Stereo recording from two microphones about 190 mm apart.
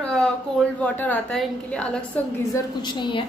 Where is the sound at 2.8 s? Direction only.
25° left (ahead or behind).